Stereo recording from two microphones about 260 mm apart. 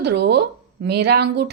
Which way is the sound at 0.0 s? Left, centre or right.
Right.